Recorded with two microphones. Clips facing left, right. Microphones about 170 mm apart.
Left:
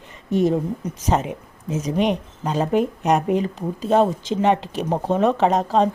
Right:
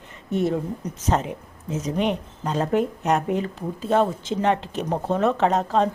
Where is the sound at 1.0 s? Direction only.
10° left (ahead or behind).